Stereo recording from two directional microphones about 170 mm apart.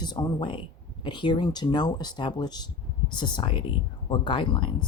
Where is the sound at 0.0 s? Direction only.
25° left (ahead or behind).